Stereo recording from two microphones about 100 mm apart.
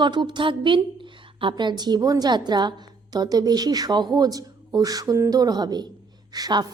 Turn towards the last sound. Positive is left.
turn(degrees=-40)  # may be behind; listen again after turning